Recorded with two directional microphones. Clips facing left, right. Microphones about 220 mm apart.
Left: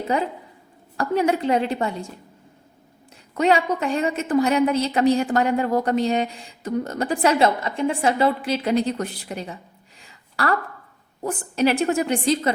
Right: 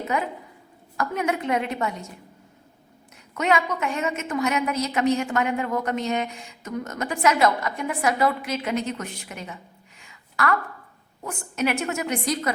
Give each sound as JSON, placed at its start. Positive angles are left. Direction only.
{"t": 0.0, "sound": "a woman's voice", "side_deg": 30}
{"t": 3.3, "sound": "a woman's voice", "side_deg": 30}
{"t": 10.0, "sound": "a sound", "side_deg": 35}
{"t": 11.2, "sound": "a woman's voice", "side_deg": 35}